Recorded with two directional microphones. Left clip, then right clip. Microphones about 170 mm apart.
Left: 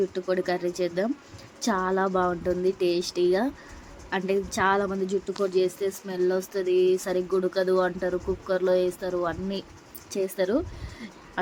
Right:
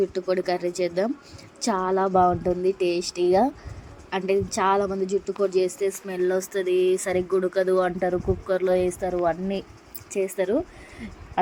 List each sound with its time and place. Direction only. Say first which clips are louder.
0.1 s speech: right 2 dB; 20° right (ahead or behind)
6.3 s speech: right 2 dB; 30° right (ahead or behind); by 10.6 s 5° right (ahead or behind)